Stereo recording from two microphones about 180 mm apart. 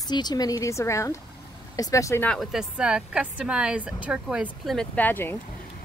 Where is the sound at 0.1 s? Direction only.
25° left (ahead or behind).